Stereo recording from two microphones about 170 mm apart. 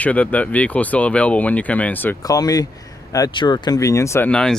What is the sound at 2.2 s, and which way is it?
Speech, 20° left (ahead or behind).